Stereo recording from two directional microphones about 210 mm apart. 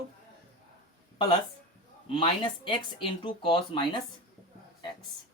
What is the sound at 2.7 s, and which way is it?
Speech, 25° left (ahead or behind).